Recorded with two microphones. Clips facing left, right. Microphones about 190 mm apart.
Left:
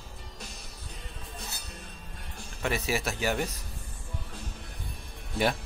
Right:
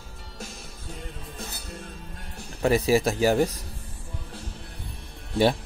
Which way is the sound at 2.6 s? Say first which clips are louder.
Right 9 dB; 35° right (ahead or behind).